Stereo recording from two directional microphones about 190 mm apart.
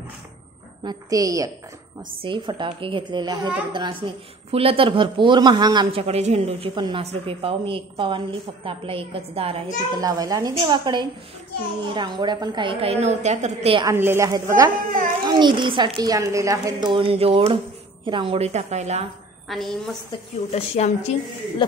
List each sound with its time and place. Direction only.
0.8 s a woman's voice: 20° right (ahead or behind)
9.9 s a woman's voice: 20° right (ahead or behind)
13.8 s a woman's voice: 15° right (ahead or behind); by 19.0 s 35° right (ahead or behind)
19.5 s a woman's voice: centre (ahead or behind)
20.1 s a woman's voice: 35° left (ahead or behind)